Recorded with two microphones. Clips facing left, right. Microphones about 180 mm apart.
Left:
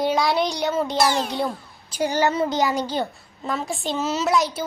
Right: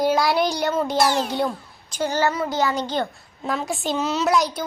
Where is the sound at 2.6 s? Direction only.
10° left (ahead or behind).